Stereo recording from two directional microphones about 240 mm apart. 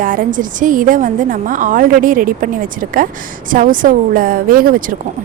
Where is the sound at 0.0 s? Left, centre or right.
Right.